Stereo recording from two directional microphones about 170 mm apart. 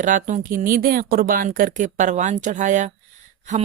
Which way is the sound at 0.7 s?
60° right (ahead or behind).